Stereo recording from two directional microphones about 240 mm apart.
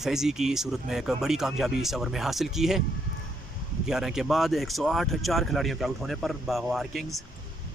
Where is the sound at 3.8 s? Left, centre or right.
Centre.